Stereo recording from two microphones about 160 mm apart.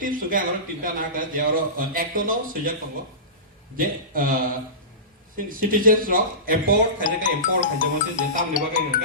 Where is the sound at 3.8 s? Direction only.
60° right (ahead or behind).